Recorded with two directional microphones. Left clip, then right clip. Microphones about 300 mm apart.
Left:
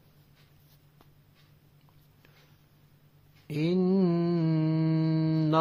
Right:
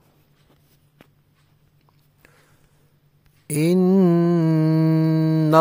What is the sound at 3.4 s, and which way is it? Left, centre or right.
Mantra, right.